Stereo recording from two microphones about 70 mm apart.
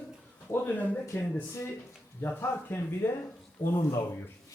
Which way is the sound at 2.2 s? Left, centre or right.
Left.